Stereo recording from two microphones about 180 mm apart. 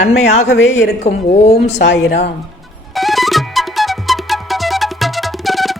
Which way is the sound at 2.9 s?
Centre (ahead or behind).